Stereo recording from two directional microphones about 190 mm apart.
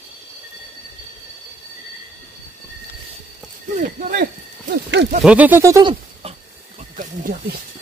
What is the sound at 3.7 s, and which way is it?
Speech, 40° right (ahead or behind).